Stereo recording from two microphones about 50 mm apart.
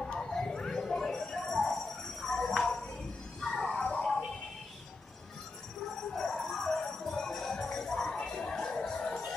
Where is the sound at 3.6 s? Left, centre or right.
Left.